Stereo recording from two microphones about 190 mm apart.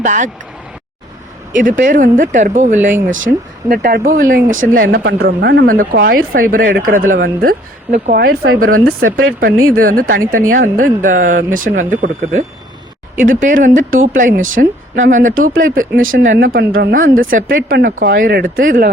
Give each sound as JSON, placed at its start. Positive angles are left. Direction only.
{"t": 0.0, "sound": "speech", "side_deg": -40}
{"t": 1.5, "sound": "speech", "side_deg": -45}
{"t": 9.0, "sound": "speech", "side_deg": -90}
{"t": 9.4, "sound": "speech", "side_deg": -50}
{"t": 16.0, "sound": "speech", "side_deg": -90}
{"t": 16.5, "sound": "speech", "side_deg": -55}